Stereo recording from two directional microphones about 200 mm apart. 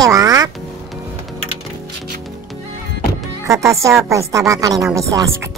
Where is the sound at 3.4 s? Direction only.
15° right (ahead or behind).